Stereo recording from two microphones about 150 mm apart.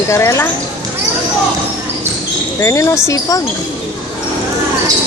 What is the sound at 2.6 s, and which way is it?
Speech, 20° left (ahead or behind).